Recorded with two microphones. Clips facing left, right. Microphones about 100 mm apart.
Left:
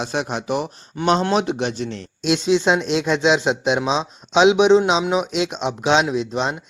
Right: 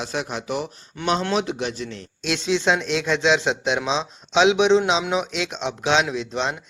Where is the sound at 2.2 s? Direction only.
15° left (ahead or behind).